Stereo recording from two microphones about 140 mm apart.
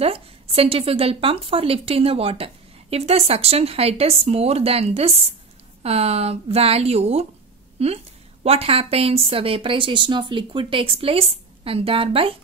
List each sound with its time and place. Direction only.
0.0 s a woman's voice: 45° right (ahead or behind)